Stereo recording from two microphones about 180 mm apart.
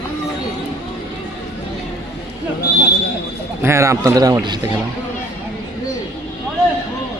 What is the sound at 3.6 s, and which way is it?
Speech, 15° right (ahead or behind).